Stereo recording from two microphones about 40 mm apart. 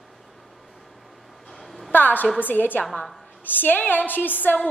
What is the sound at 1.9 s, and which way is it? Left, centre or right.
A woman's voice, left.